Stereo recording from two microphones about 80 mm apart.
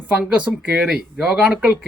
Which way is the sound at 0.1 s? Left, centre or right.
Centre.